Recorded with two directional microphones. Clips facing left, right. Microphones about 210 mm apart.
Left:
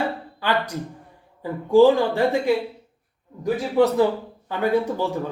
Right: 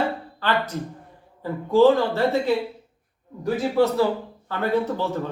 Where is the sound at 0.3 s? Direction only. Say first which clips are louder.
Left 1 dB; 10° left (ahead or behind).